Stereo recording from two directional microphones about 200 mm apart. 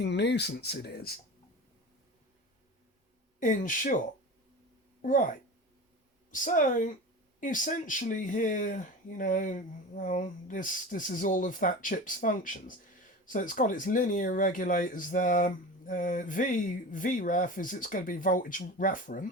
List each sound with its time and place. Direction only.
0.0 s speech: 60° left (ahead or behind)
3.4 s speech: 40° left (ahead or behind)
5.0 s speech: 40° left (ahead or behind)
6.3 s speech: 40° left (ahead or behind)